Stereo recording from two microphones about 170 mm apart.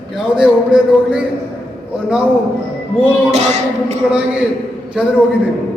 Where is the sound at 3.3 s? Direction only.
45° right (ahead or behind).